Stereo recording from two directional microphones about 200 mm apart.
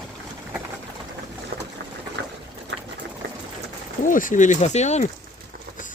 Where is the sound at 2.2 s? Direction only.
60° right (ahead or behind).